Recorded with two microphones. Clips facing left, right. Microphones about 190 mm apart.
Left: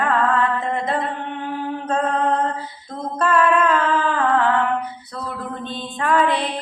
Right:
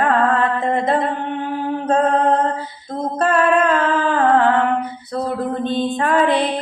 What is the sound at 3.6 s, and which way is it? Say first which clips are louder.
Music: right 2 dB; 40° right (ahead or behind).